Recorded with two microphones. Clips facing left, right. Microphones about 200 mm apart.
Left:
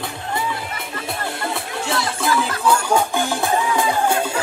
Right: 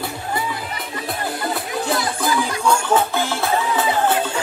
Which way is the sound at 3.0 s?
15° left (ahead or behind).